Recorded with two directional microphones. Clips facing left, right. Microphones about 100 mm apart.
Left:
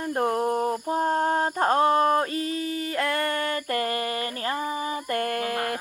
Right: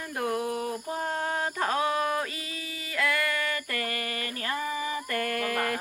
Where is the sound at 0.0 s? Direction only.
35° left (ahead or behind).